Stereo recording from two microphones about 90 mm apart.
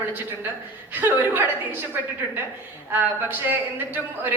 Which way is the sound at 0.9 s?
20° right (ahead or behind).